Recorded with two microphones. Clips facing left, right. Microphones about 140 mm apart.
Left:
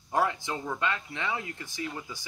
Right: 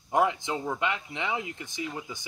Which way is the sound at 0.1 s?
20° right (ahead or behind).